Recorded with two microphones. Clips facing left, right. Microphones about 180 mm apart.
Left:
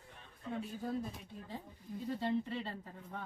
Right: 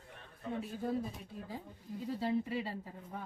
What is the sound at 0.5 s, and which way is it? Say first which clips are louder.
A woman's voice: right 2 dB; 5° right (ahead or behind).